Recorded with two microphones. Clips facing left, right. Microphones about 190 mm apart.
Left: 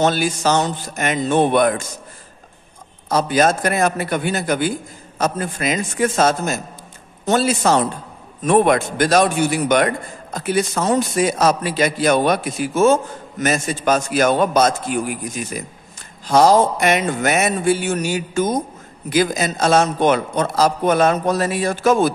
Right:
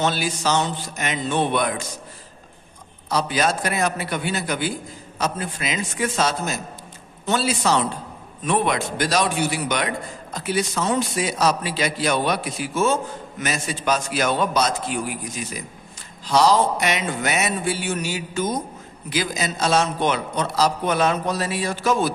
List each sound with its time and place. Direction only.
0.0 s a man's voice: 50° left (ahead or behind)
3.1 s a man's voice: 45° left (ahead or behind)